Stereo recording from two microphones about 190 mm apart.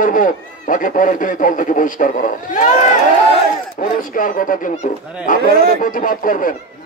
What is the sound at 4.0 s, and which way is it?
A man's voice, 45° left (ahead or behind).